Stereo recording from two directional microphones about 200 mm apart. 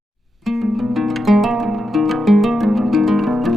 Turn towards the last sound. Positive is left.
turn(degrees=0)  # may be behind; listen again after turning